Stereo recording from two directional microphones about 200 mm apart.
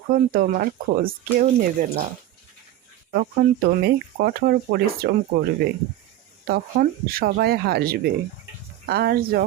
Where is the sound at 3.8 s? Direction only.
50° right (ahead or behind).